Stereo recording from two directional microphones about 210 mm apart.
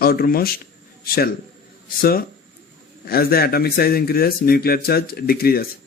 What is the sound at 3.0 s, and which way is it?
Speech, 45° left (ahead or behind).